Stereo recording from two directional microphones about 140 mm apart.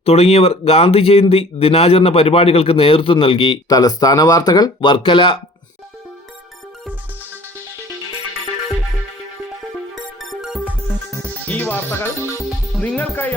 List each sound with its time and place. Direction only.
0.0 s speech: 45° left (ahead or behind)
9.9 s music: centre (ahead or behind)
11.4 s music: 10° left (ahead or behind)
12.4 s music: centre (ahead or behind)
12.8 s speech: 10° left (ahead or behind)